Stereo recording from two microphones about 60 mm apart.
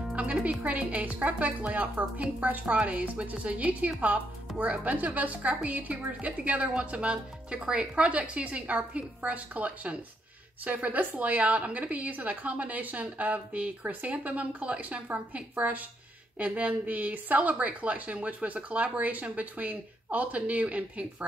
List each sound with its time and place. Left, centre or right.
0.1 s speech: right